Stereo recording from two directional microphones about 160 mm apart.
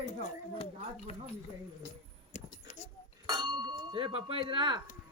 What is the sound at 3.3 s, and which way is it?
Clang, 25° right (ahead or behind).